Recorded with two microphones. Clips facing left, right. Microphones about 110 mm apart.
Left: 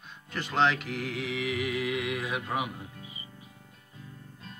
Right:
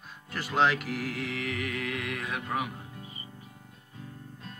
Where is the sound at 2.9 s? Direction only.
40° right (ahead or behind).